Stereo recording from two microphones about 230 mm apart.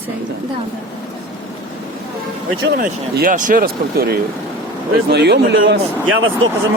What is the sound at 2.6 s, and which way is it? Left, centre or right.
Speech, right.